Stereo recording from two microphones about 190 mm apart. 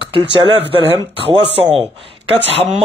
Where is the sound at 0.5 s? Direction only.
30° right (ahead or behind).